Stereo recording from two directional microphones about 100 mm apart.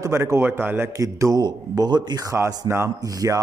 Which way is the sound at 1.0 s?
35° right (ahead or behind).